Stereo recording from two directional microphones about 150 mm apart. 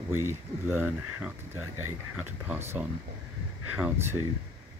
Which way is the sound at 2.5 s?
10° right (ahead or behind).